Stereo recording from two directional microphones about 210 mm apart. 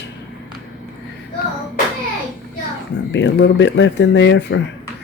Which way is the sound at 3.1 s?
55° left (ahead or behind).